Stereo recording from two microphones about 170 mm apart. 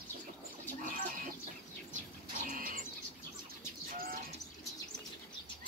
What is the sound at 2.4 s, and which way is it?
Bird, 55° right (ahead or behind).